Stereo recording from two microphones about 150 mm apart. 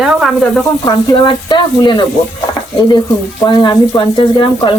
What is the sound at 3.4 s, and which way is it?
Speech, 30° left (ahead or behind).